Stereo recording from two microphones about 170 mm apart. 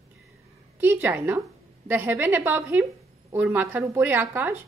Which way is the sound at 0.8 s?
10° right (ahead or behind).